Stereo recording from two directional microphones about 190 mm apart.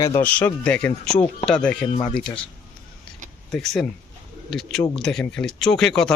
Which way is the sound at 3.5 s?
Centre (ahead or behind).